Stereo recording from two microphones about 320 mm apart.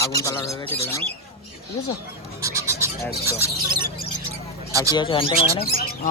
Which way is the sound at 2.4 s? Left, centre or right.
Centre.